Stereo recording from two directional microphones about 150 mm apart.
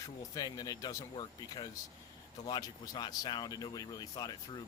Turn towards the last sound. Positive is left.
turn(degrees=25)  # may be behind; listen again after turning